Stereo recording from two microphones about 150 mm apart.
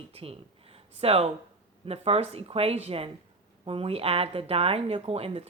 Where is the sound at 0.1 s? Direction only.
40° right (ahead or behind).